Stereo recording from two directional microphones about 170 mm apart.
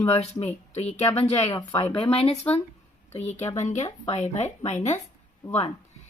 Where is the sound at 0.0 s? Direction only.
35° left (ahead or behind).